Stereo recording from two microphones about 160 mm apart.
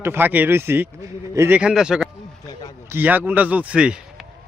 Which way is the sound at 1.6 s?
5° right (ahead or behind).